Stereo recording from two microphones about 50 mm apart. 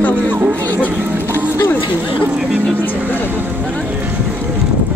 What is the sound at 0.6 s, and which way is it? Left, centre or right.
Speech, left.